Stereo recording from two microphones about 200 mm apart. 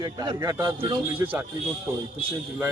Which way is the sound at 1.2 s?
10° right (ahead or behind).